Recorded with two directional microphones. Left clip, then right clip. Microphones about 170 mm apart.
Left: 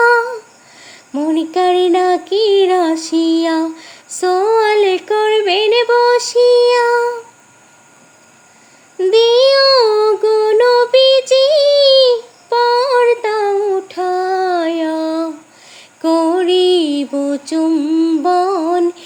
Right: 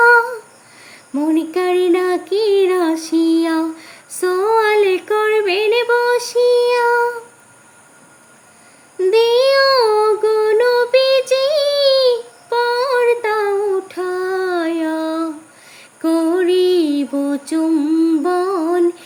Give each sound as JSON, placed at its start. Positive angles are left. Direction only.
{"t": 0.0, "sound": "a sound", "side_deg": -15}
{"t": 9.0, "sound": "child singing", "side_deg": -15}
{"t": 15.7, "sound": "female singing", "side_deg": -15}